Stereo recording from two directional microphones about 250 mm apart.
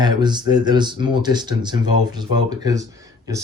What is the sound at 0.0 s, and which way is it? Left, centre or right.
Speech, centre.